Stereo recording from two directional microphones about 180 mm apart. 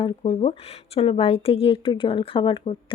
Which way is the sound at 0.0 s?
30° left (ahead or behind).